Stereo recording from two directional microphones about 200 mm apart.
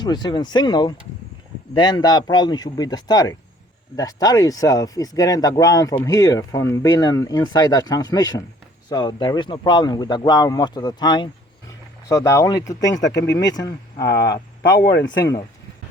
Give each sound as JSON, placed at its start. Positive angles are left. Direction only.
{"t": 0.0, "sound": "speech", "side_deg": 20}
{"t": 13.0, "sound": "speech", "side_deg": 60}
{"t": 13.3, "sound": "speech", "side_deg": 20}
{"t": 14.0, "sound": "speech", "side_deg": 55}